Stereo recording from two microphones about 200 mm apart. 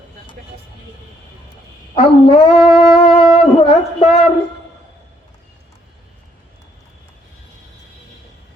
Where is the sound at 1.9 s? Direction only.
30° left (ahead or behind).